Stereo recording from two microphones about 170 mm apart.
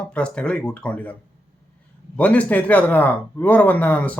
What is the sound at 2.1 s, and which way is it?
Speech, 10° left (ahead or behind).